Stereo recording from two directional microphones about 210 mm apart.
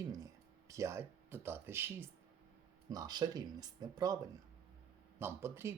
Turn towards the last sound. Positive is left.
turn(degrees=-10)  # may be behind; listen again after turning